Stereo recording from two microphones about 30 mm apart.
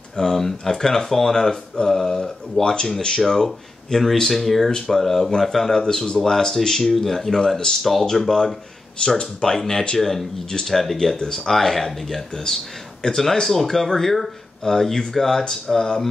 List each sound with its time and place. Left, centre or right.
0.1 s speech: centre
3.4 s speech: centre
4.6 s speech: centre
5.7 s speech: left
9.0 s speech: left
9.5 s speech: centre
11.1 s speech: centre